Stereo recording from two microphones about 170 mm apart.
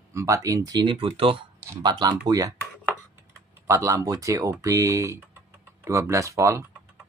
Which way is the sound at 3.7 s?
20° right (ahead or behind).